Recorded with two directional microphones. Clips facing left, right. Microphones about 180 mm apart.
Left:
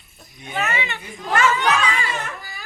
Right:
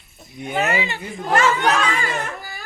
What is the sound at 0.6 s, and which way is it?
Speech, 35° right (ahead or behind).